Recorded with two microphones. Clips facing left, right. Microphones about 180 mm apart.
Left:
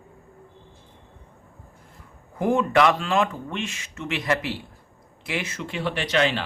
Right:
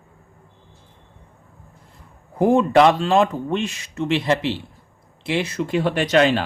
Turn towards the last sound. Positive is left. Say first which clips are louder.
# right 6 dB
turn(degrees=-40)  # may be behind; listen again after turning